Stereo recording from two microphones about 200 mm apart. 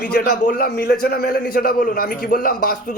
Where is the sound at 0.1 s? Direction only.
50° left (ahead or behind).